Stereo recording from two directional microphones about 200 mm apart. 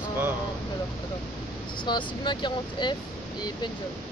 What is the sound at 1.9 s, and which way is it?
Speech, 20° left (ahead or behind).